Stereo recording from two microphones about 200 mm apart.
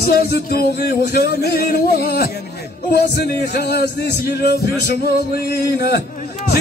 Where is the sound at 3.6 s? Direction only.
55° left (ahead or behind).